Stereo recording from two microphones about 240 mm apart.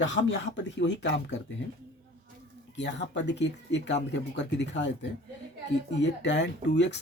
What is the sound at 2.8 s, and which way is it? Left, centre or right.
Speech, left.